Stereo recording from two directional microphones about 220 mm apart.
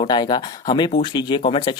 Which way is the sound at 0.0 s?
20° left (ahead or behind).